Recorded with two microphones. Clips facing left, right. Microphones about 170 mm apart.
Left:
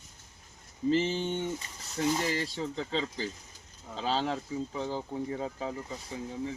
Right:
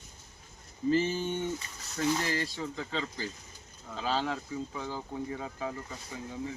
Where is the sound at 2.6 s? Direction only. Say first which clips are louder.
Left 3 dB; 30° left (ahead or behind).